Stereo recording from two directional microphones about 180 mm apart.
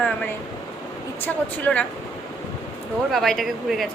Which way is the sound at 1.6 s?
5° left (ahead or behind).